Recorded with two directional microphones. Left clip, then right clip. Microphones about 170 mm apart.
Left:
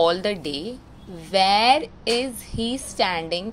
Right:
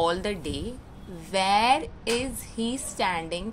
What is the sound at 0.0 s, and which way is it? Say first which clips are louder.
A woman's voice: left 6 dB; 35° left (ahead or behind).